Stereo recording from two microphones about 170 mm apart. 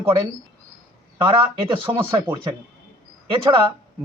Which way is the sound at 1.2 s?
30° right (ahead or behind).